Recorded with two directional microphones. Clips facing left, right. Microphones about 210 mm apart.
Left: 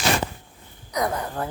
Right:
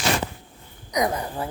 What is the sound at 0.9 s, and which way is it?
Speech, 15° right (ahead or behind).